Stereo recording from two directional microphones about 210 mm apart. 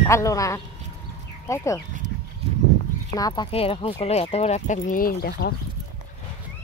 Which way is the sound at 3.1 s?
20° left (ahead or behind).